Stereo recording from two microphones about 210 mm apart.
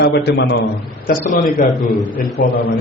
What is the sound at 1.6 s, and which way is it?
Speech, 40° left (ahead or behind).